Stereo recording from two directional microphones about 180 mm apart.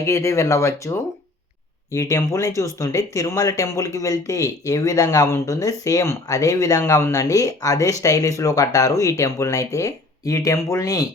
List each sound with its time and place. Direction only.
0.0 s speech: 15° left (ahead or behind)